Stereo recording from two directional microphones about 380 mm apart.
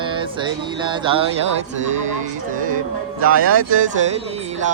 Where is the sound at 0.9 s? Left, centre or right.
Centre.